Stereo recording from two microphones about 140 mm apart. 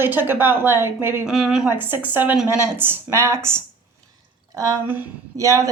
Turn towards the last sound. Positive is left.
turn(degrees=-20)  # may be behind; listen again after turning